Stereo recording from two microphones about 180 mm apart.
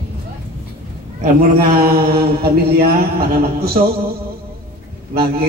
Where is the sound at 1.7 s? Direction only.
55° right (ahead or behind).